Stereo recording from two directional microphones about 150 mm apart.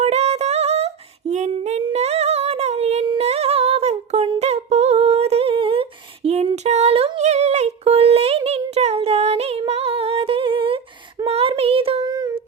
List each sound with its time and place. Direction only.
0.0 s female singing: 45° right (ahead or behind)
11.3 s child singing: 40° right (ahead or behind); by 12.3 s 25° right (ahead or behind)